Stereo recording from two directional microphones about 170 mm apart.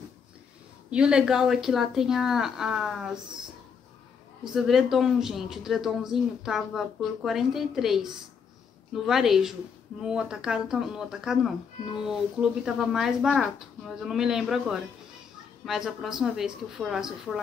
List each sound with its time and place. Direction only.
0.8 s speech: 5° right (ahead or behind)
4.6 s speech: centre (ahead or behind)